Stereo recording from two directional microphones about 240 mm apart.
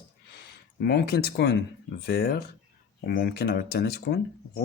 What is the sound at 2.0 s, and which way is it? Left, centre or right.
Speech, left.